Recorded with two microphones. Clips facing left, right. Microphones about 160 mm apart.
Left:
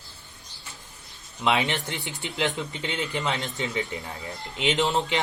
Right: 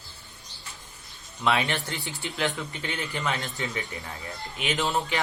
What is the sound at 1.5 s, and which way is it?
Speech, 20° left (ahead or behind).